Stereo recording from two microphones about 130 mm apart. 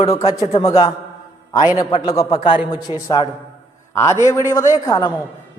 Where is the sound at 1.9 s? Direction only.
50° left (ahead or behind).